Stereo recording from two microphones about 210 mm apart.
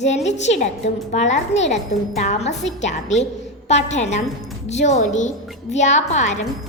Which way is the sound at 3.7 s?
35° left (ahead or behind).